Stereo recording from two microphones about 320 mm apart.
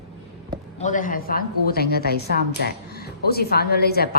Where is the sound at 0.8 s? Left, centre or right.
Left.